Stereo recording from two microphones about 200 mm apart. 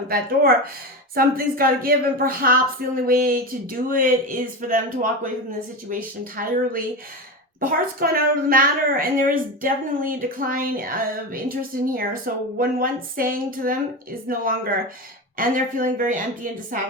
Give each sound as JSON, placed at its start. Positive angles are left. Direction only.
{"t": 0.1, "sound": "a woman's voice", "side_deg": -45}
{"t": 5.9, "sound": "a woman's voice", "side_deg": -45}